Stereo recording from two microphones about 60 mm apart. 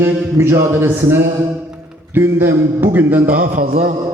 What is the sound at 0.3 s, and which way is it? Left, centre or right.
Speech, right.